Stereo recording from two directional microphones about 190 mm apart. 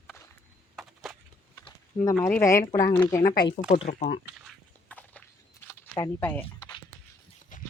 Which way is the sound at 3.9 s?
40° left (ahead or behind).